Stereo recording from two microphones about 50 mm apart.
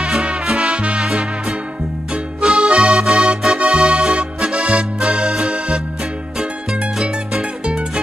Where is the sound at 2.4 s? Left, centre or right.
Centre.